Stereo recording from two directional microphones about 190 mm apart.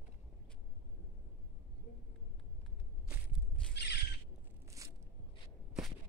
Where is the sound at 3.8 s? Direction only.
60° left (ahead or behind).